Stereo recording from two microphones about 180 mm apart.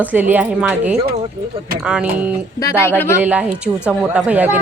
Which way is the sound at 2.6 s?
15° left (ahead or behind).